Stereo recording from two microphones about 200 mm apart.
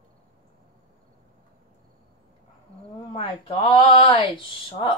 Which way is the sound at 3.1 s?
25° left (ahead or behind).